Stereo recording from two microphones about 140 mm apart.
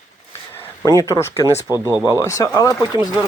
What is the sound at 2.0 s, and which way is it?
Speech, 20° left (ahead or behind).